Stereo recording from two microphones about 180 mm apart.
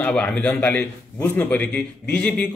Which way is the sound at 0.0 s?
5° left (ahead or behind).